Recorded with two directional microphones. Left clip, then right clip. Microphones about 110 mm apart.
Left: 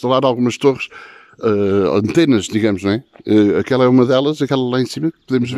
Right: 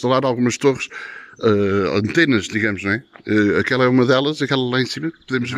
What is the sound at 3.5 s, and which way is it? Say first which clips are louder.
Speech: left 3 dB; 20° left (ahead or behind).